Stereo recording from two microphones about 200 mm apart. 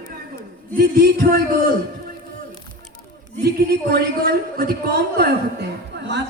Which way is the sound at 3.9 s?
50° right (ahead or behind).